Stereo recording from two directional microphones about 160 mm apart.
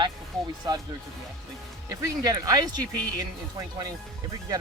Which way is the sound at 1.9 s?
25° right (ahead or behind).